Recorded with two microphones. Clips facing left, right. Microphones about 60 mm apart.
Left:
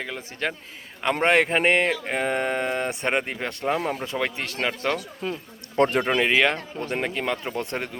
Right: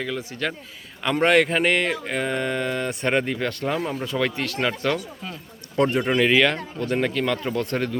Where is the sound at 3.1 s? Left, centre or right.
Centre.